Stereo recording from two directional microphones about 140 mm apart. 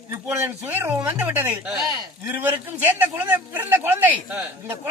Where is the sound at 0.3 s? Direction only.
15° right (ahead or behind).